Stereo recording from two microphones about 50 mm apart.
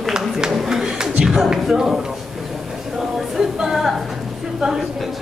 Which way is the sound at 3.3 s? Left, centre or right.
Centre.